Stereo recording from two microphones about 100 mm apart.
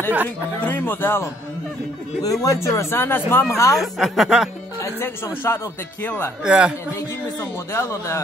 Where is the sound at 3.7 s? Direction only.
Centre (ahead or behind).